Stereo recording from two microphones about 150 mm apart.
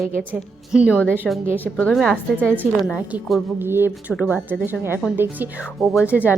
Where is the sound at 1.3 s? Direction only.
Centre (ahead or behind).